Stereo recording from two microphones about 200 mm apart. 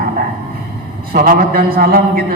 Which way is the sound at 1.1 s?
45° right (ahead or behind).